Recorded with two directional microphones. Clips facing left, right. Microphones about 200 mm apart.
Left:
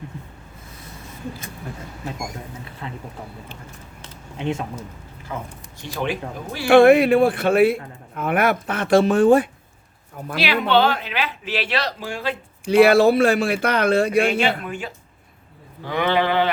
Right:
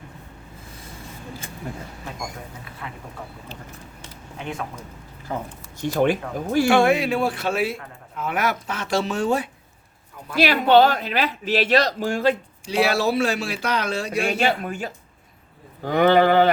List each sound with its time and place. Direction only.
2.8 s speech: 30° left (ahead or behind)
4.4 s speech: 25° left (ahead or behind)
5.3 s speech: 35° right (ahead or behind)
5.8 s speech: 50° right (ahead or behind)
6.7 s a man's voice: 55° left (ahead or behind)
10.3 s speech: 45° right (ahead or behind)
12.6 s a man's voice: 55° left (ahead or behind)
14.3 s speech: 45° right (ahead or behind)